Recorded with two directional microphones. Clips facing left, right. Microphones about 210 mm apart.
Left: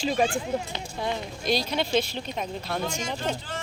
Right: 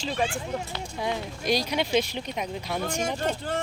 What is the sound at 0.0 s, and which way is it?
Speech, 15° left (ahead or behind).